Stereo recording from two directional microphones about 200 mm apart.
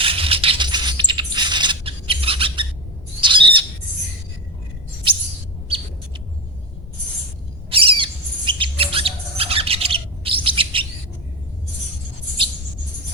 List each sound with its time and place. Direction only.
0.0 s a sound: 25° right (ahead or behind)
3.2 s squawk: 25° right (ahead or behind)
5.1 s chirp: 25° right (ahead or behind)
5.6 s bird: 30° right (ahead or behind)
7.7 s squawk: 25° right (ahead or behind)